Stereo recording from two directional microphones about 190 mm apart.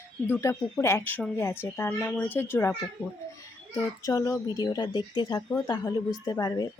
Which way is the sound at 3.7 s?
20° left (ahead or behind).